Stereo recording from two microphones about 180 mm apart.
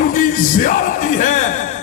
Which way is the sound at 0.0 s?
50° left (ahead or behind).